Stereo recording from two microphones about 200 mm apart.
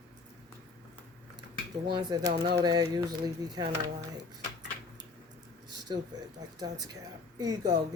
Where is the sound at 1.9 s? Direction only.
20° right (ahead or behind).